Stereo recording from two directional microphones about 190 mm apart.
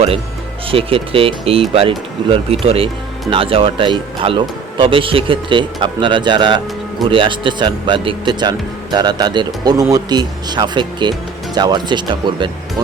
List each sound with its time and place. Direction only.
0.7 s speech: 30° right (ahead or behind)